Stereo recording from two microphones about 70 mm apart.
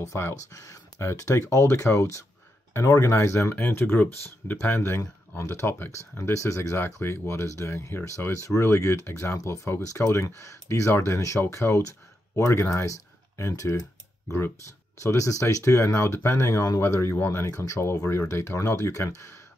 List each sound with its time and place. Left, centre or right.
0.0 s speech: left
3.5 s speech: left
6.8 s speech: left
11.1 s speech: left
15.0 s speech: left